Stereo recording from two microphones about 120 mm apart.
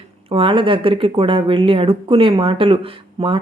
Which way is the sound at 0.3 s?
45° right (ahead or behind).